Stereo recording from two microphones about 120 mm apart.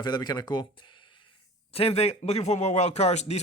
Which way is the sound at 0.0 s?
35° left (ahead or behind).